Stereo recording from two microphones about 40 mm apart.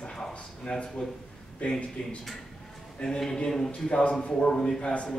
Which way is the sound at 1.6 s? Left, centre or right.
Left.